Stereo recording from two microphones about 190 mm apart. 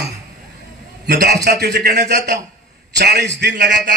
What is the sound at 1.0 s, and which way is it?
A man's voice, 60° right (ahead or behind).